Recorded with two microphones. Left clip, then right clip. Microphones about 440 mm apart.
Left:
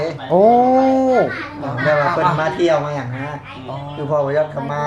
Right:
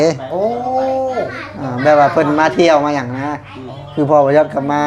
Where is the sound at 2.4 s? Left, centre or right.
Right.